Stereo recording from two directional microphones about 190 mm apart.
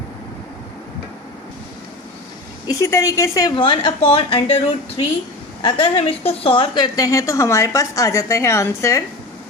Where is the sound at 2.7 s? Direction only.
15° left (ahead or behind).